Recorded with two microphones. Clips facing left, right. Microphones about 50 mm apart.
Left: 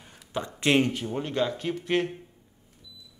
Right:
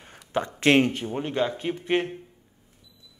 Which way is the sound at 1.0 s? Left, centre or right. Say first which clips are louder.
Right 1 dB; centre.